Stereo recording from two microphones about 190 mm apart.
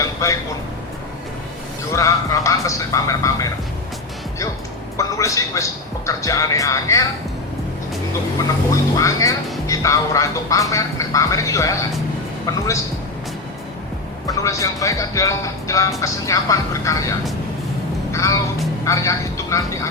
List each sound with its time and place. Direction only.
0.0 s a sound: 15° left (ahead or behind)
1.9 s speech: 15° left (ahead or behind)
4.9 s speech: 15° left (ahead or behind)
9.0 s speech: 15° left (ahead or behind)
14.3 s speech: 15° left (ahead or behind)